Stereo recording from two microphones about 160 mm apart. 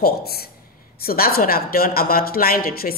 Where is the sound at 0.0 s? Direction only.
75° left (ahead or behind).